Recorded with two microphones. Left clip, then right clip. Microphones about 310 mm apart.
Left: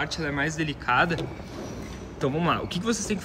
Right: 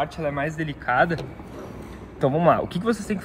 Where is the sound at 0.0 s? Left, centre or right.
Centre.